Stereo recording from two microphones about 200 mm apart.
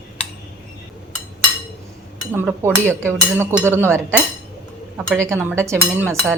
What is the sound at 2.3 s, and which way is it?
Speech, 10° right (ahead or behind).